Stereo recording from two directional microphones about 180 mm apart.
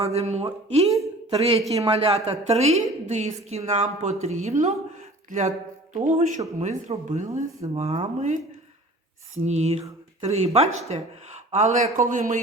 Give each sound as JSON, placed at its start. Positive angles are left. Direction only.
{"t": 0.0, "sound": "a woman's voice", "side_deg": -35}
{"t": 9.4, "sound": "a woman's voice", "side_deg": -35}